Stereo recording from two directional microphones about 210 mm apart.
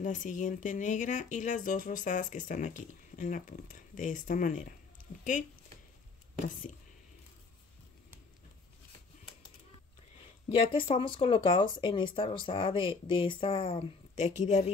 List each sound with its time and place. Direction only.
0.0 s speech: 35° left (ahead or behind)
6.4 s speech: 35° left (ahead or behind)
10.5 s speech: 25° left (ahead or behind)